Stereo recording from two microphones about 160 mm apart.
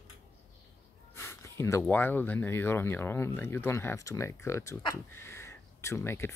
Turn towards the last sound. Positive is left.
turn(degrees=15)  # may be behind; listen again after turning